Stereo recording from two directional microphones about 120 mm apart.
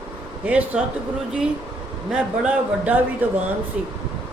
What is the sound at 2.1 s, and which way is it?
A man's voice, 10° right (ahead or behind).